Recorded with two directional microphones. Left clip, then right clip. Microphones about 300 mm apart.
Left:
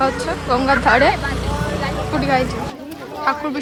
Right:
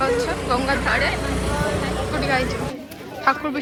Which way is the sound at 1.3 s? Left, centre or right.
Right.